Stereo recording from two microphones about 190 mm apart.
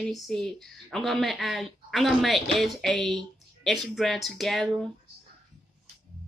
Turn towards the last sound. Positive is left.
turn(degrees=0)  # may be behind; listen again after turning